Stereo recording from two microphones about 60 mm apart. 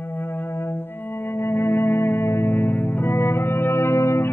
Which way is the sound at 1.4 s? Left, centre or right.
Left.